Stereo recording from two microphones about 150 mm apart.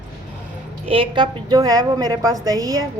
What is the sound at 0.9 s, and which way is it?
A woman's voice, 35° right (ahead or behind).